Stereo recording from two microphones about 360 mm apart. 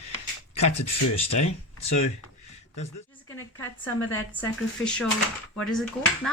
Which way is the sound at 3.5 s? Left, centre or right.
Centre.